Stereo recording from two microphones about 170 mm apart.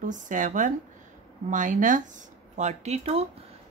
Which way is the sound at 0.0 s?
50° right (ahead or behind).